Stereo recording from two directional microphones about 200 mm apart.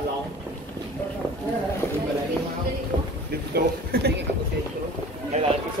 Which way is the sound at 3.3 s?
50° right (ahead or behind).